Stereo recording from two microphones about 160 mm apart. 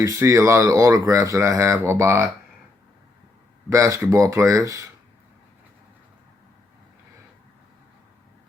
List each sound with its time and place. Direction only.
0.0 s speech: 20° right (ahead or behind)
3.7 s speech: 20° right (ahead or behind)